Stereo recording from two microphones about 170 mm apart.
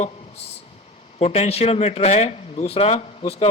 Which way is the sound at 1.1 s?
40° left (ahead or behind).